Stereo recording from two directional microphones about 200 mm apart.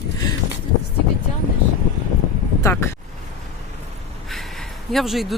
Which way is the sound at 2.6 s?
15° left (ahead or behind).